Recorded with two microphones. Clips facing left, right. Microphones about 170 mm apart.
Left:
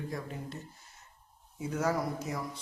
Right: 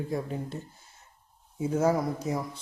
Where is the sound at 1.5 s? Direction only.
30° right (ahead or behind).